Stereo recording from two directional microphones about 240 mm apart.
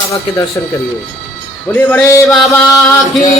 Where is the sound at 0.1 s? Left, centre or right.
Centre.